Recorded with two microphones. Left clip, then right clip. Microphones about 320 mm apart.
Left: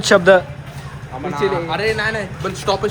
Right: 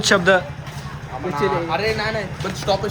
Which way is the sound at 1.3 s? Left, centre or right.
Left.